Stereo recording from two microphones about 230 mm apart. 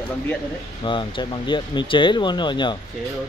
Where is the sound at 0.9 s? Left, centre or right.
Left.